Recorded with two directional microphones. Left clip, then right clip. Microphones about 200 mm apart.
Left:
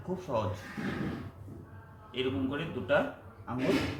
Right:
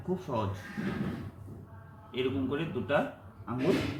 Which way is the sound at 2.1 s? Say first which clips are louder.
Right 1 dB; 5° left (ahead or behind).